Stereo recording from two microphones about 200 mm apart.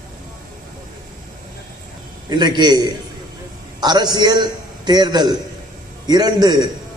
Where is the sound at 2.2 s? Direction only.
20° right (ahead or behind).